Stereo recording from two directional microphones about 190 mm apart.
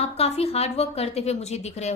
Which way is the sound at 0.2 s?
30° left (ahead or behind).